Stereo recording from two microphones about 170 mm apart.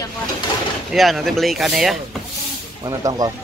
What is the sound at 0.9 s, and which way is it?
Speech, centre (ahead or behind).